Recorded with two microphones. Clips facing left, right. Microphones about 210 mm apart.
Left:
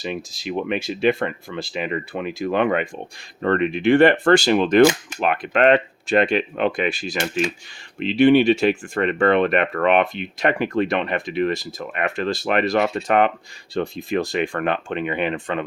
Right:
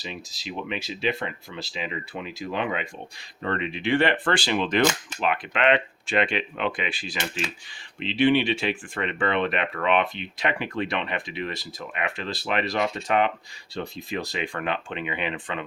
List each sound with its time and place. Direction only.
0.0 s speech: 55° left (ahead or behind)